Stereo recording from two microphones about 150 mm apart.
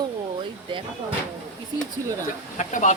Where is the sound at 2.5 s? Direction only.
55° left (ahead or behind).